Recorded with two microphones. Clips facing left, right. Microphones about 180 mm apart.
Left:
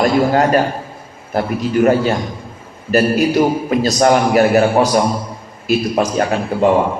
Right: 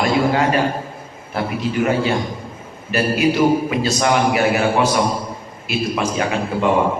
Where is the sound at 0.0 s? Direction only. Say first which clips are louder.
Left 4 dB; 45° left (ahead or behind).